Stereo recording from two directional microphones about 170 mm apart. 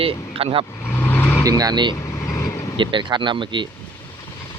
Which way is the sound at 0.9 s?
15° left (ahead or behind).